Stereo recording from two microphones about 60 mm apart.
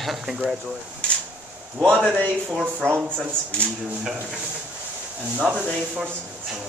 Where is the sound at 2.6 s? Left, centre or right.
Right.